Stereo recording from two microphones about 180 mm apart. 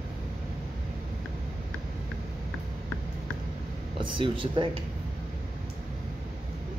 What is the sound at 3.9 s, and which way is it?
Speech, 30° right (ahead or behind).